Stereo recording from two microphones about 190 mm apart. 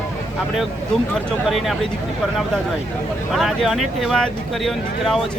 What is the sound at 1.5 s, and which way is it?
Speech, centre (ahead or behind).